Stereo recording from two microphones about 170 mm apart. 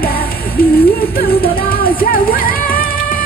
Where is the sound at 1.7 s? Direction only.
60° left (ahead or behind).